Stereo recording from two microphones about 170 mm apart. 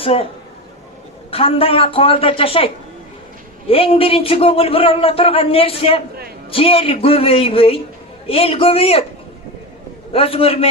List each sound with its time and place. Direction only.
0.0 s a man's voice: 35° left (ahead or behind)
1.3 s speech: 35° left (ahead or behind)
3.7 s speech: 35° left (ahead or behind)
10.1 s speech: 35° left (ahead or behind)